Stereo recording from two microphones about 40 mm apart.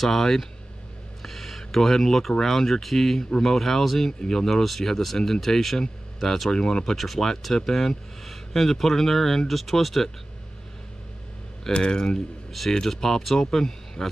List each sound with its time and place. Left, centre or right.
0.0 s speech: centre
1.2 s a sound: centre
2.5 s speech: centre
4.2 s speech: centre
6.5 s speech: left
6.8 s speech: centre
11.6 s speech: centre